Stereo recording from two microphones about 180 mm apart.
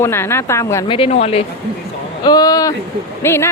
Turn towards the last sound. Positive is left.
turn(degrees=15)  # may be behind; listen again after turning